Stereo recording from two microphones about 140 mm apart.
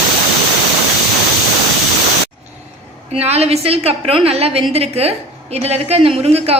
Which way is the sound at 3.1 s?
50° right (ahead or behind).